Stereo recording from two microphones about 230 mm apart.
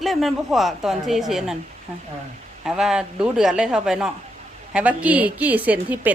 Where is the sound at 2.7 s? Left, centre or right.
Centre.